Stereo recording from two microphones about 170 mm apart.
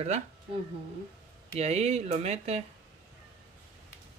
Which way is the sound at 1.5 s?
40° right (ahead or behind).